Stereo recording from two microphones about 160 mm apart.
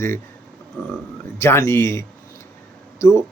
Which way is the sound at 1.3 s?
15° left (ahead or behind).